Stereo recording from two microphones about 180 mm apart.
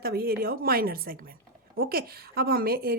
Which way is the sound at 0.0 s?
60° right (ahead or behind).